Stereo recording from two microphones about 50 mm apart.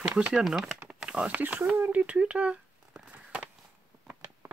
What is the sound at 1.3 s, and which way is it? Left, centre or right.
Speech, right.